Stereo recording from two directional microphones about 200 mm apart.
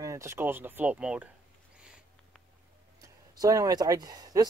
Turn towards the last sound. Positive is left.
turn(degrees=-20)  # may be behind; listen again after turning